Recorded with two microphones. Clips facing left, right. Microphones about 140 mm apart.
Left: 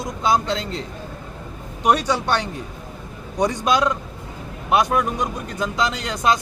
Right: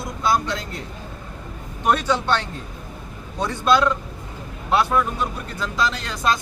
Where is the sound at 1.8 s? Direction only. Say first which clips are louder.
Left 1 dB; 15° left (ahead or behind).